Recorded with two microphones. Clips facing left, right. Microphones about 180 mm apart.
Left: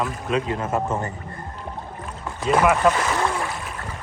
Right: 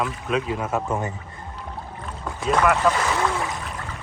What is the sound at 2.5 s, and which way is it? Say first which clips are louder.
Speech: left 2 dB; 5° left (ahead or behind).